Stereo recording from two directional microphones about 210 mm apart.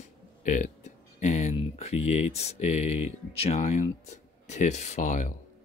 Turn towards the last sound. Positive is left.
turn(degrees=35)  # may be behind; listen again after turning